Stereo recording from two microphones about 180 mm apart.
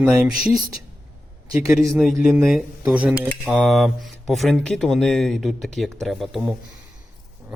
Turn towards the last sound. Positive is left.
turn(degrees=0)  # may be behind; listen again after turning